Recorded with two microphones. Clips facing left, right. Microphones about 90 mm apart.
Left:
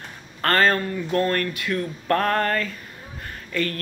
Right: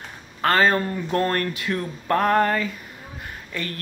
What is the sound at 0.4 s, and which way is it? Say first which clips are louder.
Speech: right 1 dB; 10° right (ahead or behind).